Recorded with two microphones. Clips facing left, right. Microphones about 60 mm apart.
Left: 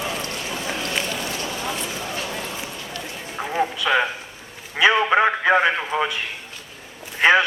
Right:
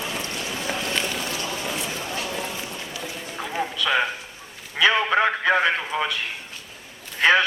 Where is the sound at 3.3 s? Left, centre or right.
Centre.